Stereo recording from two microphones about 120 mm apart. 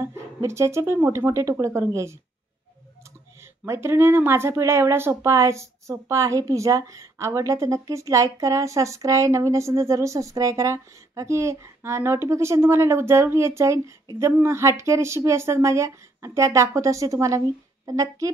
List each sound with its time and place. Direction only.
0.0 s speech: 25° right (ahead or behind)
3.6 s speech: 25° right (ahead or behind)